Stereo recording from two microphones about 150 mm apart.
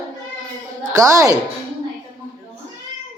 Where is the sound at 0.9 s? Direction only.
20° right (ahead or behind).